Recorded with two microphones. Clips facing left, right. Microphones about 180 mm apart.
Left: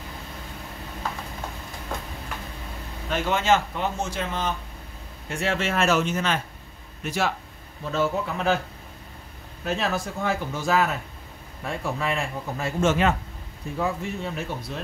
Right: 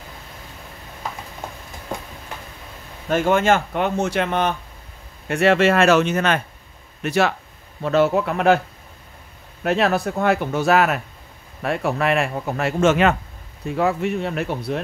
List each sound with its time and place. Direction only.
3.1 s speech: 50° right (ahead or behind)
9.6 s speech: 65° right (ahead or behind)